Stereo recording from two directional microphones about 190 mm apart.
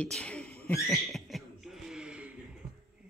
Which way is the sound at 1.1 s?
Centre (ahead or behind).